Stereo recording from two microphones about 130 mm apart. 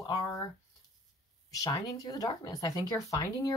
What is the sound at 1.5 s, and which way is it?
Speech, 30° left (ahead or behind).